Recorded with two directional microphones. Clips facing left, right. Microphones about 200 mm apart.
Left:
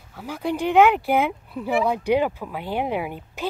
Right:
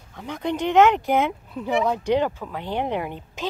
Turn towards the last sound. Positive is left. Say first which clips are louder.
# left 1 dB
turn(degrees=10)  # may be behind; listen again after turning